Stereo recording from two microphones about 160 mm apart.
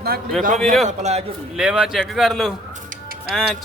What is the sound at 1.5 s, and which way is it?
Speech, 5° right (ahead or behind).